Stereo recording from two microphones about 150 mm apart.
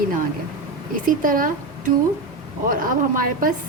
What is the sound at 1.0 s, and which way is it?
Speech, 65° right (ahead or behind).